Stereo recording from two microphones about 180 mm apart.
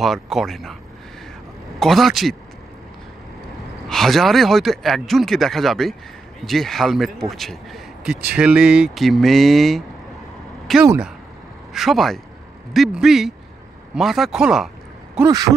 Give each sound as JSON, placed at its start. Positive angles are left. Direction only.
{"t": 0.0, "sound": "speech", "side_deg": 0}
{"t": 1.8, "sound": "speech", "side_deg": 0}
{"t": 3.9, "sound": "speech", "side_deg": 0}
{"t": 15.1, "sound": "speech", "side_deg": -20}